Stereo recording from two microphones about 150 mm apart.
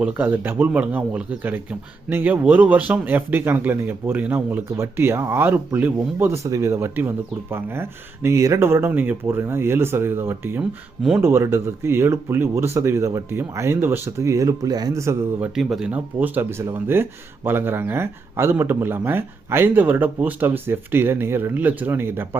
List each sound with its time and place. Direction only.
0.0 s speech: 10° right (ahead or behind)
10.6 s speech: 5° right (ahead or behind)
11.2 s speech: 20° right (ahead or behind)
15.5 s speech: 5° right (ahead or behind)